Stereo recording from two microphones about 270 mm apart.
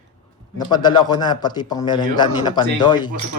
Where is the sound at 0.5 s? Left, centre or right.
Centre.